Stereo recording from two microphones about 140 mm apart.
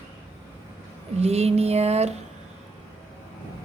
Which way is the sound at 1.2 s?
50° right (ahead or behind).